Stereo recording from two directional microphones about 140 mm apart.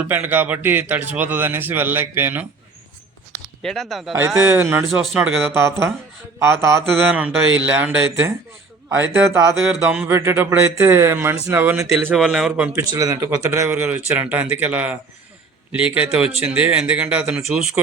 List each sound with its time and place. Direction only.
0.0 s a man's voice: 15° right (ahead or behind)
3.6 s a man's voice: 5° left (ahead or behind)
4.4 s a man's voice: 15° right (ahead or behind)
11.8 s a man's voice: centre (ahead or behind)
12.7 s a man's voice: 25° right (ahead or behind); by 17.7 s 5° right (ahead or behind)